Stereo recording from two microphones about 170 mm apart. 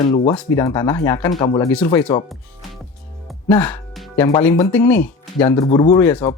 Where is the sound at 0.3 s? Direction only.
20° left (ahead or behind).